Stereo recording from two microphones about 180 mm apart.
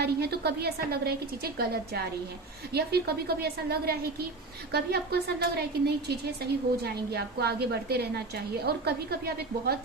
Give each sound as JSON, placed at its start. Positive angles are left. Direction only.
{"t": 0.0, "sound": "a woman's voice", "side_deg": -60}